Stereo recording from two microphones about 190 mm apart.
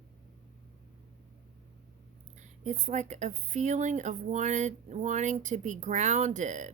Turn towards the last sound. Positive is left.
turn(degrees=-40)  # may be behind; listen again after turning